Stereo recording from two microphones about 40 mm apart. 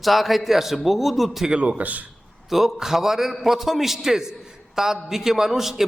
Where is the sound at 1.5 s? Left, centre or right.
Right.